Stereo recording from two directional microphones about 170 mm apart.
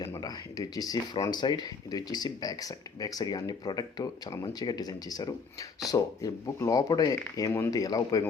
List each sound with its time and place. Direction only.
0.0 s speech: 25° left (ahead or behind)